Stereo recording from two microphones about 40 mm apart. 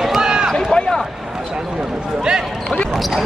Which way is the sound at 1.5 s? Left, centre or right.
Centre.